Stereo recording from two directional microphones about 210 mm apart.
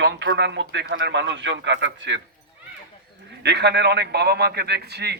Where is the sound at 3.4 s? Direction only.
55° right (ahead or behind).